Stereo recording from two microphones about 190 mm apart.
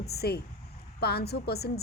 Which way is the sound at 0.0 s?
55° left (ahead or behind).